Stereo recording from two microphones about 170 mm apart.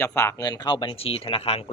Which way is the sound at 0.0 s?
15° left (ahead or behind).